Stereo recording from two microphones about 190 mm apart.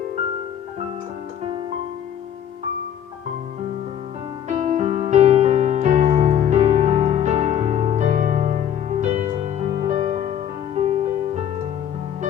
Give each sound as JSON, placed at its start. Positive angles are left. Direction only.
{"t": 4.4, "sound": "music", "side_deg": -35}